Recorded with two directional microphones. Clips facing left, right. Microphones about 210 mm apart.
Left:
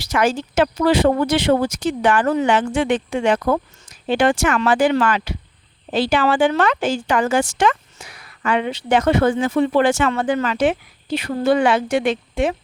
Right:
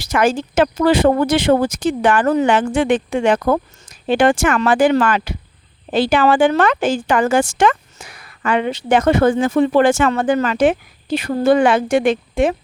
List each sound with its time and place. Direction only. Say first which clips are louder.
0.0 s a woman's voice: right 3 dB; 50° right (ahead or behind)